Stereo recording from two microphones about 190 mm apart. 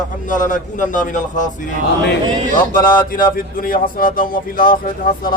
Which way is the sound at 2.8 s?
45° left (ahead or behind).